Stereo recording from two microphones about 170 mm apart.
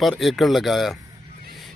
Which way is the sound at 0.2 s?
Centre (ahead or behind).